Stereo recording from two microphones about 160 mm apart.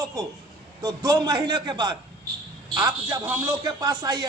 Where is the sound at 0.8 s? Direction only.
20° right (ahead or behind).